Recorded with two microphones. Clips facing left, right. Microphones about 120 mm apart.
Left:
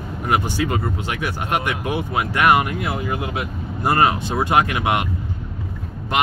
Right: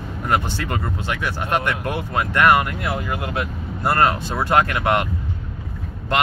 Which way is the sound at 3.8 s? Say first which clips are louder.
Left 1 dB; 15° left (ahead or behind).